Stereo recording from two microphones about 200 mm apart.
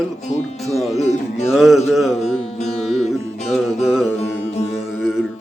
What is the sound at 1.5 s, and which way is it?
Music, centre (ahead or behind).